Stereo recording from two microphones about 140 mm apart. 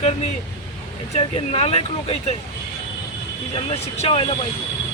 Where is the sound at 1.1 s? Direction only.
45° left (ahead or behind).